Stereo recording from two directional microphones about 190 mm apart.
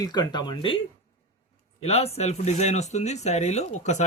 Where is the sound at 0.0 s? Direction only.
20° left (ahead or behind).